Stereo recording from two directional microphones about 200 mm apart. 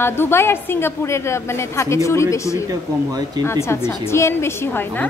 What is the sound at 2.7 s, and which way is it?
Speech, 20° right (ahead or behind).